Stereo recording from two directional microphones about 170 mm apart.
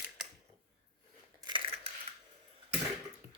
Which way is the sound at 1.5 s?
25° right (ahead or behind).